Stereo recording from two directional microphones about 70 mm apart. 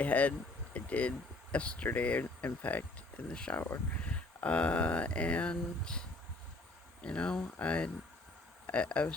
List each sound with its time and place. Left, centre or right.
0.0 s speech: left